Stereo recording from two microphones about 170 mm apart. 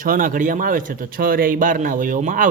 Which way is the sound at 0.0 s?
55° right (ahead or behind).